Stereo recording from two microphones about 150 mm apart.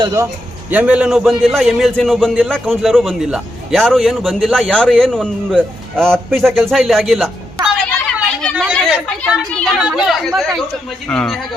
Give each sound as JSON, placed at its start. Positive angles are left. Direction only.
{"t": 0.0, "sound": "a man's voice", "side_deg": -20}
{"t": 0.7, "sound": "a man's voice", "side_deg": -10}
{"t": 7.9, "sound": "a sound", "side_deg": 5}
{"t": 8.9, "sound": "a man's voice", "side_deg": -5}